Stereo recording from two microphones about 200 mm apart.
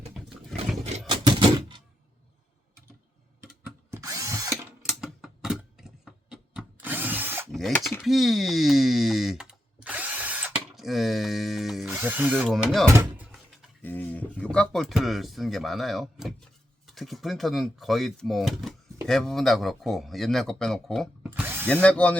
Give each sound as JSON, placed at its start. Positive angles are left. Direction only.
{"t": 1.0, "sound": "a sound", "side_deg": -25}
{"t": 3.9, "sound": "drill", "side_deg": -15}
{"t": 4.5, "sound": "typewriter", "side_deg": 0}
{"t": 7.5, "sound": "speech", "side_deg": 0}
{"t": 13.8, "sound": "speech", "side_deg": 10}
{"t": 21.3, "sound": "ratchet", "side_deg": -10}
{"t": 21.7, "sound": "speech", "side_deg": 5}